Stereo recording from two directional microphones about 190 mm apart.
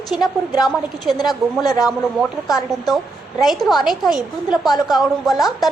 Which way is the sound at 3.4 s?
Centre (ahead or behind).